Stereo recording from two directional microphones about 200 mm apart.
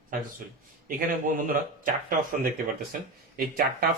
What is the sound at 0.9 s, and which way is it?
Speech, 45° right (ahead or behind).